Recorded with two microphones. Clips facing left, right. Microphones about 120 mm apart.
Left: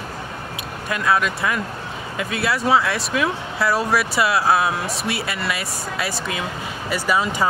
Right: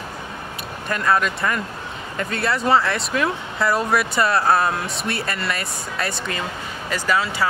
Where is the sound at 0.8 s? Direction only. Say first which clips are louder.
Even; 5° left (ahead or behind).